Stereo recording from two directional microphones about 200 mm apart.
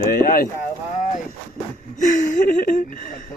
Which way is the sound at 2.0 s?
40° left (ahead or behind).